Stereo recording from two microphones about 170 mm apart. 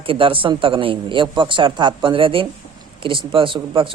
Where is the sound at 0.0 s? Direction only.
30° right (ahead or behind).